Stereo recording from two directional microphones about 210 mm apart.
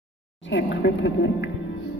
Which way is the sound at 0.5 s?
60° left (ahead or behind).